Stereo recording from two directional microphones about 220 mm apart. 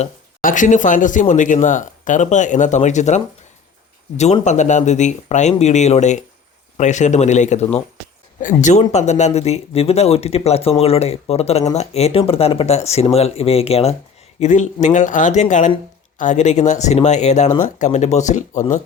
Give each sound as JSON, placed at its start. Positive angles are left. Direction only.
{"t": 0.0, "sound": "speech", "side_deg": 35}
{"t": 4.2, "sound": "speech", "side_deg": 30}